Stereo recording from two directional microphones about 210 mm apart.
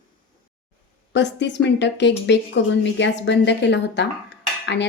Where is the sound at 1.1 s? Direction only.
55° left (ahead or behind).